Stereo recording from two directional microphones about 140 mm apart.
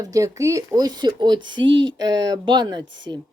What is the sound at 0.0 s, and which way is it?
Speech, 25° right (ahead or behind).